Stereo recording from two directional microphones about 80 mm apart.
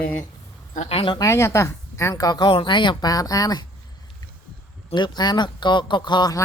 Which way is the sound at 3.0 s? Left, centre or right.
Left.